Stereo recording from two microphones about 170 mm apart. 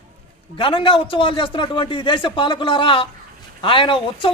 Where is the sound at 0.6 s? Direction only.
30° left (ahead or behind).